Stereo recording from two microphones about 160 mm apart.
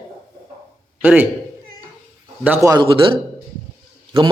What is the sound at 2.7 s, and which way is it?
Speech, 30° right (ahead or behind).